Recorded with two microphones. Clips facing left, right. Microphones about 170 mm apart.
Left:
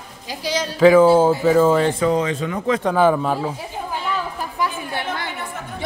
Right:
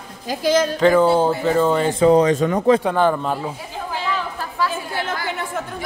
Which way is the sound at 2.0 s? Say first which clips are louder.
Right 6 dB; 35° right (ahead or behind).